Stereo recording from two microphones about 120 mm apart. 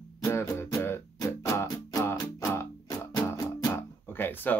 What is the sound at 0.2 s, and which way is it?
Music, 20° left (ahead or behind).